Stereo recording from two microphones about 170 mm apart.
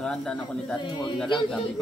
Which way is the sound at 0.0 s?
5° left (ahead or behind).